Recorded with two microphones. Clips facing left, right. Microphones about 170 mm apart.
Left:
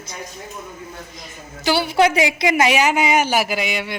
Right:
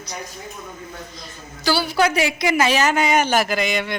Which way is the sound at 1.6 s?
20° left (ahead or behind).